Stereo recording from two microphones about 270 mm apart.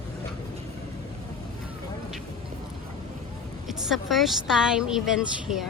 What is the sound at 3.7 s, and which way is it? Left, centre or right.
A woman's voice, centre.